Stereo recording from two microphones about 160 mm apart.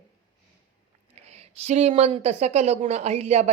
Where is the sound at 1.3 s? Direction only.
40° right (ahead or behind).